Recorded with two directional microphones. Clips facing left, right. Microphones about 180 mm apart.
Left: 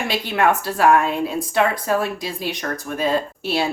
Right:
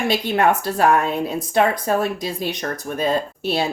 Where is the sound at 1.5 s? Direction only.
45° right (ahead or behind).